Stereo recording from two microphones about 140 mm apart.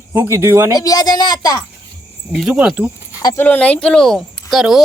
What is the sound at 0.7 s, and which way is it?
Speech, 25° left (ahead or behind).